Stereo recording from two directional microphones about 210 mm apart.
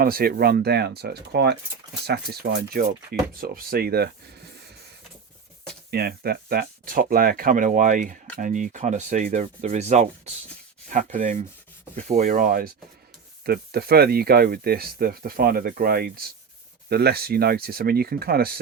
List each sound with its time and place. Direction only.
0.0 s speech: 45° right (ahead or behind)
5.9 s speech: 50° right (ahead or behind); by 10.3 s 35° right (ahead or behind)
10.8 s rub: 40° right (ahead or behind)
12.0 s speech: 35° right (ahead or behind)